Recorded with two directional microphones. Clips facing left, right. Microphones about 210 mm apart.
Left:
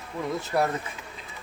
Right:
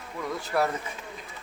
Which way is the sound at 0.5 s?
20° left (ahead or behind).